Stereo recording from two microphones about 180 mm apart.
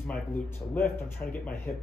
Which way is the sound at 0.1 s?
10° left (ahead or behind).